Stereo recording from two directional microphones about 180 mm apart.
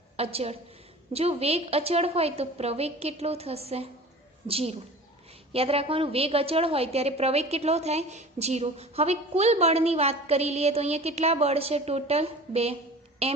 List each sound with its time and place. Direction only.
0.2 s a woman's voice: 35° right (ahead or behind)